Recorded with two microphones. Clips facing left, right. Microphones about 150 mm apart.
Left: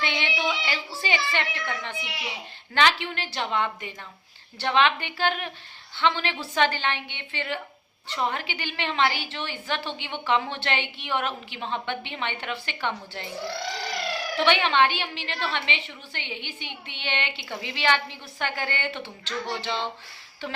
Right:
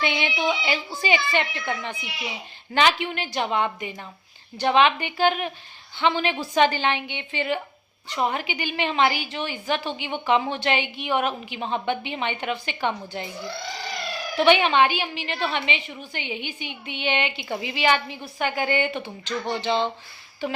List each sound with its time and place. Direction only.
0.0 s a sound: 15° right (ahead or behind)
2.7 s a woman's voice: 15° right (ahead or behind)
14.3 s a woman's voice: 15° right (ahead or behind)